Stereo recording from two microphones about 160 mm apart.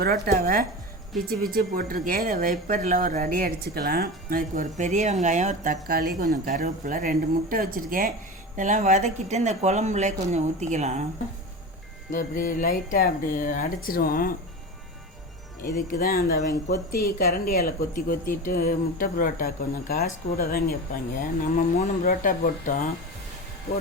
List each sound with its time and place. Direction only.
0.0 s speech: 65° right (ahead or behind)
8.5 s speech: 50° right (ahead or behind)
12.1 s speech: 55° left (ahead or behind)
15.6 s speech: 60° left (ahead or behind)
21.8 s speech: 55° left (ahead or behind)